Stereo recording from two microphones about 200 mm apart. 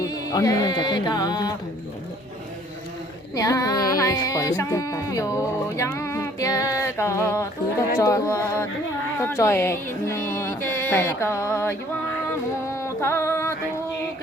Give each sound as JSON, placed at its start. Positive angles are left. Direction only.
{"t": 0.0, "sound": "music", "side_deg": 15}
{"t": 3.3, "sound": "music", "side_deg": 15}
{"t": 12.7, "sound": "music", "side_deg": 15}